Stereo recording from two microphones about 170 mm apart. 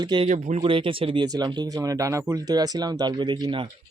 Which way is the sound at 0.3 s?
45° right (ahead or behind).